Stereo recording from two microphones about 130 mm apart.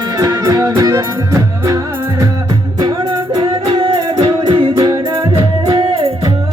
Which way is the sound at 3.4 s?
40° right (ahead or behind).